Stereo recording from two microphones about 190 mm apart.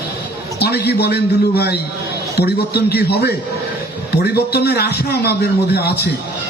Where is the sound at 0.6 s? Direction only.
60° left (ahead or behind).